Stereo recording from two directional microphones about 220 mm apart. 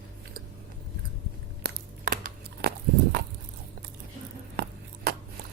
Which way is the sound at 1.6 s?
40° right (ahead or behind).